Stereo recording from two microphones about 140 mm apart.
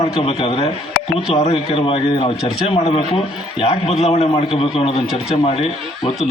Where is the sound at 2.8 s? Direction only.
55° left (ahead or behind).